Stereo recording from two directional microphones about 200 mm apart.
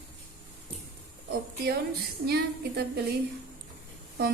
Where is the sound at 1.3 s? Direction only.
50° right (ahead or behind).